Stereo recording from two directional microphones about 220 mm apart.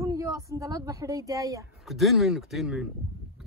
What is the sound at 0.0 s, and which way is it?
Speech, 15° right (ahead or behind).